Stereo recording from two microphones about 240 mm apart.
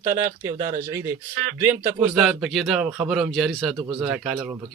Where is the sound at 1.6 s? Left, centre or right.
Centre.